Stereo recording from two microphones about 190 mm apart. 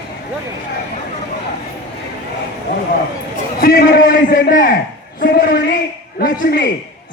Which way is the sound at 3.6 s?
50° left (ahead or behind).